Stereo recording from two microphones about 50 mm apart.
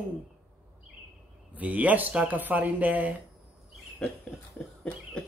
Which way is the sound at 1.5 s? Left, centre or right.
Right.